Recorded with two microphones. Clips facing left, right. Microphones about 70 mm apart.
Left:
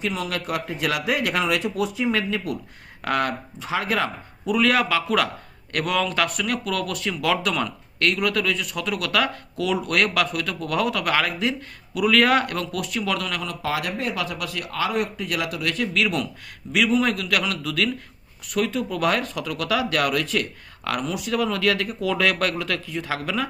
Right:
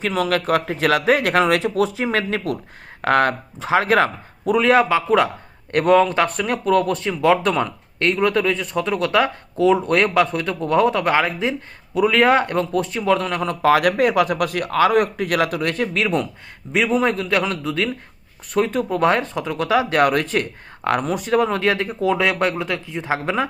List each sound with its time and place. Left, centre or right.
0.2 s a man's voice: right
3.0 s a man's voice: right
4.5 s speech: right
13.6 s a man's voice: right